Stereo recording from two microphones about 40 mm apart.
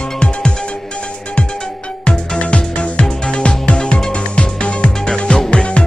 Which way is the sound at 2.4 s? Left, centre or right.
Left.